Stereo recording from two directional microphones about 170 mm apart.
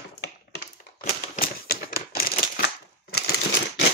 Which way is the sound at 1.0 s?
60° left (ahead or behind).